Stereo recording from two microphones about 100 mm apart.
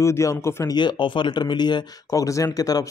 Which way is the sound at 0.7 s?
50° left (ahead or behind).